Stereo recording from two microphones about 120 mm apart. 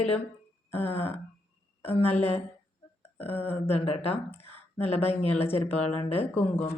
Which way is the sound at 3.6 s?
55° left (ahead or behind).